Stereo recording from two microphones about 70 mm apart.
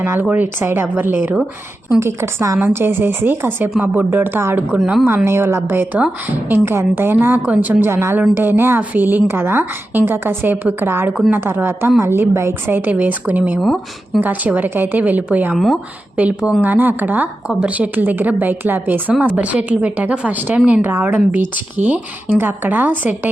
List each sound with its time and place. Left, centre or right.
0.0 s a woman's voice: right
2.0 s speech: right
4.8 s speech: centre
5.0 s a woman's voice: right
7.9 s a woman's voice: right
13.6 s speech: centre
14.2 s a woman's voice: right
15.5 s speech: centre
16.1 s a woman's voice: right